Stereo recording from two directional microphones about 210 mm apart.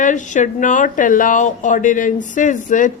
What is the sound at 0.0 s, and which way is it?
Speech, 35° left (ahead or behind).